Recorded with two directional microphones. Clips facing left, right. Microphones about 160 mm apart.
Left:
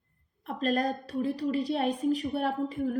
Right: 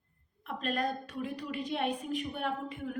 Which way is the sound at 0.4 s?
35° left (ahead or behind).